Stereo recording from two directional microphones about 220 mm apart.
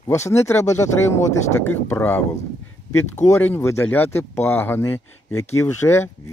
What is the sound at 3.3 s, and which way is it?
Speech, 10° left (ahead or behind).